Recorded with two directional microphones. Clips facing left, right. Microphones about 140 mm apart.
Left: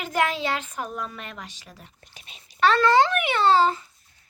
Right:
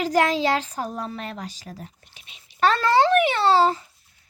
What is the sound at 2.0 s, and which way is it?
Speech, 40° left (ahead or behind).